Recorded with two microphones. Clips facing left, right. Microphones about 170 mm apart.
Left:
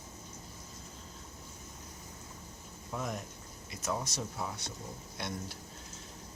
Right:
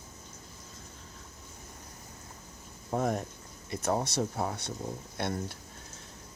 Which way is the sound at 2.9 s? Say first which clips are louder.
Right 8 dB; 50° right (ahead or behind).